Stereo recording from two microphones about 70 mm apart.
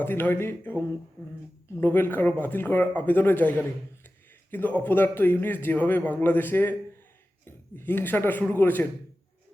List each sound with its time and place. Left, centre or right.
0.0 s a man's voice: left
1.8 s a man's voice: left
4.5 s a man's voice: left